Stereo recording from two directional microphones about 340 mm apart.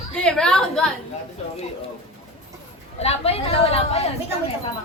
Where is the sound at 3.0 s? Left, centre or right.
Centre.